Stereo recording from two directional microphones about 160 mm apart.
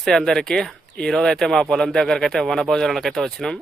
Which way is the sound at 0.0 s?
5° left (ahead or behind).